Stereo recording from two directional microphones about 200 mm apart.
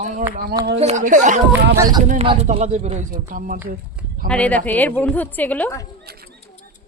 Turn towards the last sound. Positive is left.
turn(degrees=-50)  # may be behind; listen again after turning